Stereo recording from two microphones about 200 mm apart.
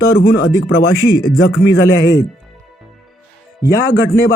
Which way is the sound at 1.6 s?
70° left (ahead or behind).